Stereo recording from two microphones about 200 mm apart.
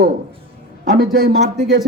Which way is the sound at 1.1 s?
50° right (ahead or behind).